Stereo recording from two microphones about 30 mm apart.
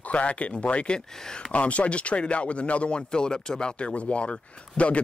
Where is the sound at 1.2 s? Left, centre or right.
Left.